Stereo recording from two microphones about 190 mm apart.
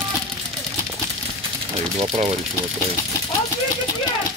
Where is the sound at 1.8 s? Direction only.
30° right (ahead or behind).